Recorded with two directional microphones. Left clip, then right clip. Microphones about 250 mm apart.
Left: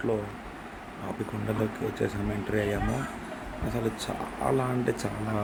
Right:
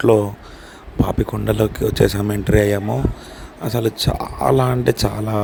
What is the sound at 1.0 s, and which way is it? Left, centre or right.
Speech, right.